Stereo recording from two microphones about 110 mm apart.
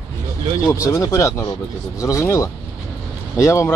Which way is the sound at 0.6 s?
30° left (ahead or behind).